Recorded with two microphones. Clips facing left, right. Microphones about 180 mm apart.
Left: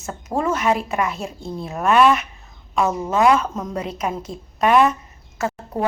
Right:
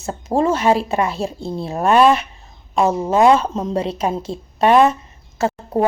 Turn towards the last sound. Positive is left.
turn(degrees=-30)  # may be behind; listen again after turning